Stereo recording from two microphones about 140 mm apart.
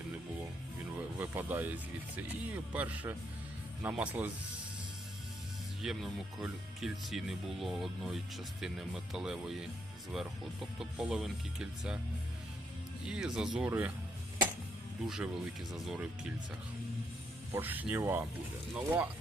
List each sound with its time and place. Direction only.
0.9 s speech: 15° right (ahead or behind)
5.8 s speech: 5° right (ahead or behind)
13.1 s speech: 5° right (ahead or behind)
15.0 s speech: 5° right (ahead or behind)
17.5 s speech: 15° right (ahead or behind)